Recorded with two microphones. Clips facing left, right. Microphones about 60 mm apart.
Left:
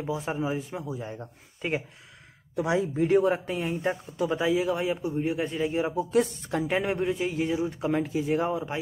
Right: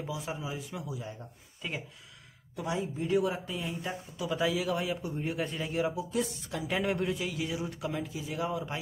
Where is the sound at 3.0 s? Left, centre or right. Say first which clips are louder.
Left 6 dB; left.